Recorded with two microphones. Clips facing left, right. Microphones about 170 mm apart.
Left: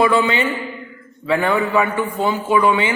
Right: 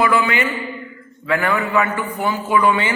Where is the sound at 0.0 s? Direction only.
20° left (ahead or behind).